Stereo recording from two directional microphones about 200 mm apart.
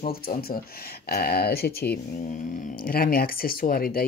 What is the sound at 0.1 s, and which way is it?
Speech, 50° left (ahead or behind).